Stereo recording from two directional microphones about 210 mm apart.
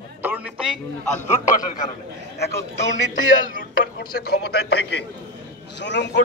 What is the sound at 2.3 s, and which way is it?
Speech, 50° left (ahead or behind).